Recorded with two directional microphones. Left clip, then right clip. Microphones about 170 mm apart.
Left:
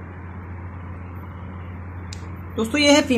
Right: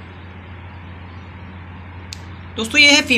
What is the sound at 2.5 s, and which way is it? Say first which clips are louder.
Speech: right 5 dB; 20° left (ahead or behind).